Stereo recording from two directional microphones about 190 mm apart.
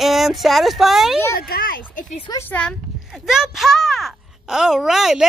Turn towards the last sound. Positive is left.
turn(degrees=0)  # may be behind; listen again after turning